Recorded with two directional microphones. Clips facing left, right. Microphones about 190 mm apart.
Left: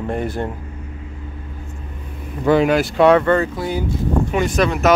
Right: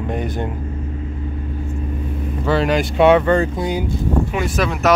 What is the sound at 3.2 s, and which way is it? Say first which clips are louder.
Speech: right 1 dB; 15° right (ahead or behind).